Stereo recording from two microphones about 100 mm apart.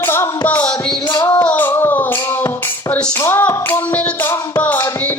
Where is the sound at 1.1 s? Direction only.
45° left (ahead or behind).